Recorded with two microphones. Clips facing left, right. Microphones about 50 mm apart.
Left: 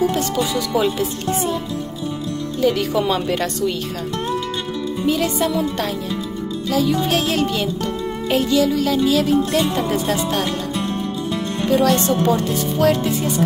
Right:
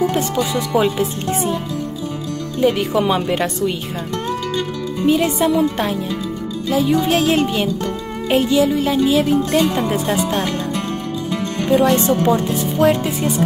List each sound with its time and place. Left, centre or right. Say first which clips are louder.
0.1 s speech: right 1 dB; right
2.6 s speech: right 2 dB; right
5.0 s speech: right 4 dB; centre
10.7 s music: even; right
11.6 s speech: right 2 dB; right